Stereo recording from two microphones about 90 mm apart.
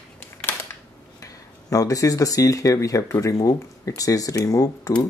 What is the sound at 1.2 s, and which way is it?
Speech, 40° left (ahead or behind).